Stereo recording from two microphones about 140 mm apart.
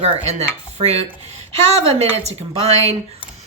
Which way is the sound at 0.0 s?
50° right (ahead or behind).